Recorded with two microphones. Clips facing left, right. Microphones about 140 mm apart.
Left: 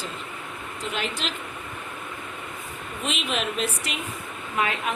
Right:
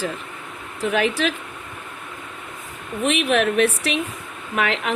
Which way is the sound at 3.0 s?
65° right (ahead or behind).